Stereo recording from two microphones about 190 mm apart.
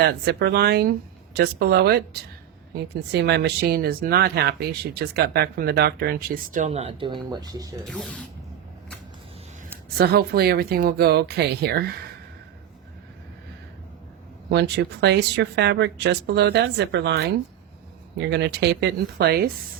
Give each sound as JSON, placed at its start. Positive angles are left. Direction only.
{"t": 0.0, "sound": "speech", "side_deg": -55}
{"t": 7.9, "sound": "speech", "side_deg": 5}
{"t": 10.0, "sound": "speech", "side_deg": -55}
{"t": 14.5, "sound": "speech", "side_deg": -60}